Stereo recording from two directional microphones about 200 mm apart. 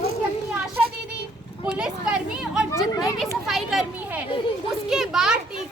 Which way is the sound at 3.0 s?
Centre (ahead or behind).